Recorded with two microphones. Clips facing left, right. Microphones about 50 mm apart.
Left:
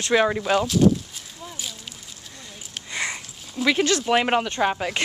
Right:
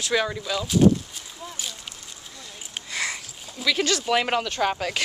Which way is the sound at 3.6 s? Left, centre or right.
Left.